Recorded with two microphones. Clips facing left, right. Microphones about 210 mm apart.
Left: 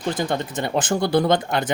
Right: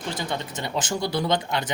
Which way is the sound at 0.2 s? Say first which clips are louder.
Left 6 dB; 50° left (ahead or behind).